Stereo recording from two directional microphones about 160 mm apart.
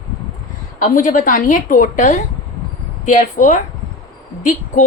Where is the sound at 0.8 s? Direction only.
55° left (ahead or behind).